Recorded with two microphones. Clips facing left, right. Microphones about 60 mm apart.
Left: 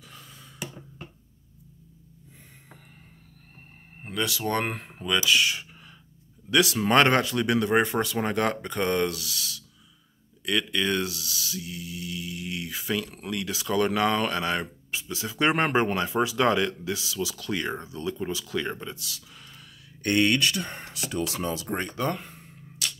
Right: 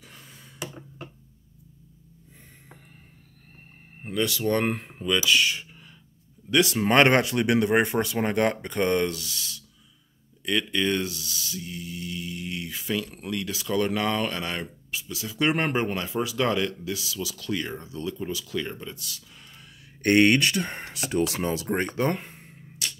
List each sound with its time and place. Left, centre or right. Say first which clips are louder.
0.1 s a sound: left 1 dB; centre
4.0 s a sound: right 3 dB; centre
4.3 s mantra: right 3 dB; centre
6.5 s mantra: even; centre
7.1 s speech: right 2 dB; right; by 9.5 s centre
10.4 s mantra: right 1 dB; centre
14.9 s speech: left 1 dB; left
20.0 s speech: right 4 dB; right